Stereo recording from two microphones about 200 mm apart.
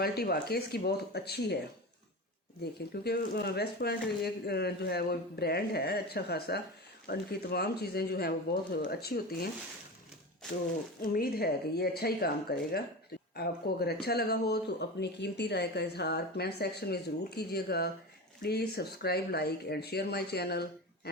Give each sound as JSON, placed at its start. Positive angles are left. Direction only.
{"t": 0.0, "sound": "speech", "side_deg": 50}
{"t": 2.9, "sound": "speech", "side_deg": 55}
{"t": 11.0, "sound": "speech", "side_deg": 45}